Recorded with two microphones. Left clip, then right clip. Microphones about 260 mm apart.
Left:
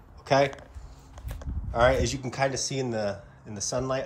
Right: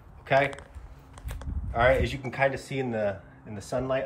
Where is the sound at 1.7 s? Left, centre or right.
Centre.